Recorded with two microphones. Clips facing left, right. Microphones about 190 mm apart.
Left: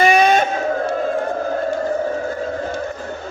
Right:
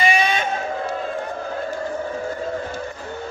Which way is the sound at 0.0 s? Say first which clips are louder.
Left 7 dB; 45° left (ahead or behind).